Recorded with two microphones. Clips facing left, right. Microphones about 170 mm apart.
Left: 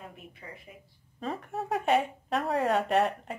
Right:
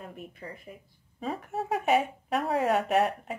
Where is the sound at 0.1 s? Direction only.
45° right (ahead or behind).